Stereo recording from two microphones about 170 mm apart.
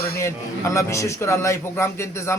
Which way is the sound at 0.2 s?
15° left (ahead or behind).